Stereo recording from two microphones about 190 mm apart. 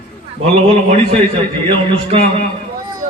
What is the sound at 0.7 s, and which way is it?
A man's voice, 30° right (ahead or behind).